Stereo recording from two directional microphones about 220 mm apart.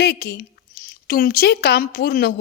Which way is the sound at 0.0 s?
45° left (ahead or behind).